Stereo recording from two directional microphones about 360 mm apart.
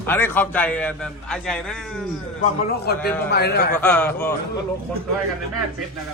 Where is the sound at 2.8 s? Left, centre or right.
Left.